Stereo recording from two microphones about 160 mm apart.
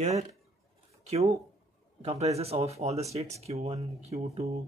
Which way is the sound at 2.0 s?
40° right (ahead or behind).